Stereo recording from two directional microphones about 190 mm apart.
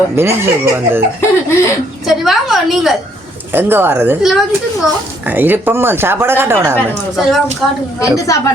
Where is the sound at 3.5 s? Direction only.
10° right (ahead or behind).